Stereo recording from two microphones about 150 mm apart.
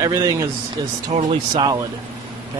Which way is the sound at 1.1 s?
40° right (ahead or behind).